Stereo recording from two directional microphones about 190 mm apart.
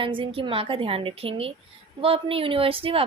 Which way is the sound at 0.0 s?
25° right (ahead or behind).